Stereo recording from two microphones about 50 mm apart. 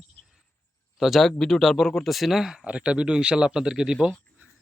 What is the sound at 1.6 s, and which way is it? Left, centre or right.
Speech, centre.